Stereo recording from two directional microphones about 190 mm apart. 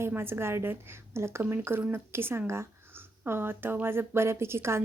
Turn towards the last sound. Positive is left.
turn(degrees=-15)  # may be behind; listen again after turning